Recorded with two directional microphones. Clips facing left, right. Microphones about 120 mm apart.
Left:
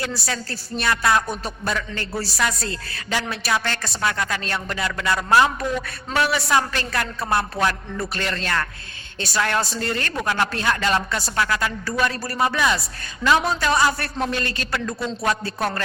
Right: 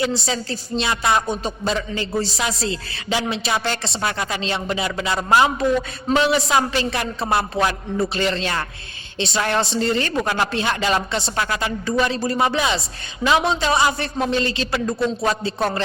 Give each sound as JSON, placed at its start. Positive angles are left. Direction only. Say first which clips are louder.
{"t": 0.0, "sound": "a man's voice", "louder": "right 5 dB", "side_deg": -20}
{"t": 8.1, "sound": "a man's voice", "louder": "right 3 dB", "side_deg": -25}